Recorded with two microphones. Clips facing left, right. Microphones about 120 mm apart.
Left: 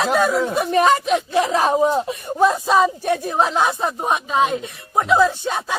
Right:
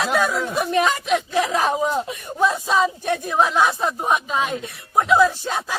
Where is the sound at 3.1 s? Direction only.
30° left (ahead or behind).